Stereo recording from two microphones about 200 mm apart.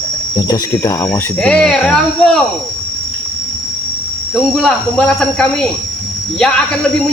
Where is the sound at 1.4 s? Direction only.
5° left (ahead or behind).